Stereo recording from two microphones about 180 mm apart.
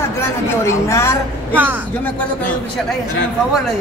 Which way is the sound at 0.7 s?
15° left (ahead or behind).